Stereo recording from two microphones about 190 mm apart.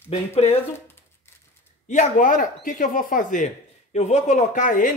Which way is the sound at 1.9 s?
40° left (ahead or behind).